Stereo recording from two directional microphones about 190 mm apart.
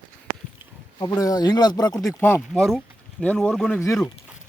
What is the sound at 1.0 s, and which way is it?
Speech, 20° left (ahead or behind).